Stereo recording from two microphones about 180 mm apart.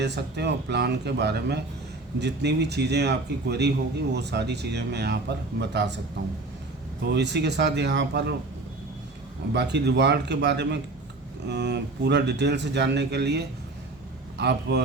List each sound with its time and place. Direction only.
0.0 s speech: 70° right (ahead or behind)
7.0 s speech: 70° right (ahead or behind)
9.5 s speech: 70° right (ahead or behind)